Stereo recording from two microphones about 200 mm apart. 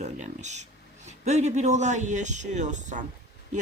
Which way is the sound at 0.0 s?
35° right (ahead or behind).